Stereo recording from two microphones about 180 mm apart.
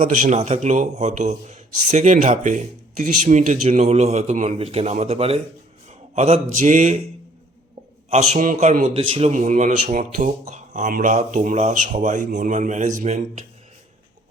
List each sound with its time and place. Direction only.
0.0 s a man's voice: 40° right (ahead or behind)
8.1 s a man's voice: 40° right (ahead or behind)